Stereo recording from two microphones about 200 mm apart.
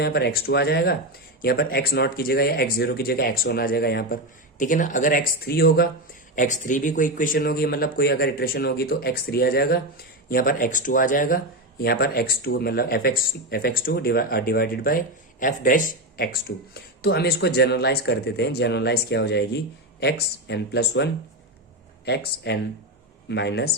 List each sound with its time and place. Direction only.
0.0 s speech: 55° left (ahead or behind)